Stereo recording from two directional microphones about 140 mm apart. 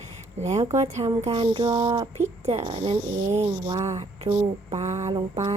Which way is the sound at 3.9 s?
45° right (ahead or behind).